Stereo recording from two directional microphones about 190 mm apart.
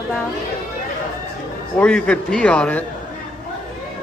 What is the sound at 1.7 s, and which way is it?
A man's voice, 5° left (ahead or behind).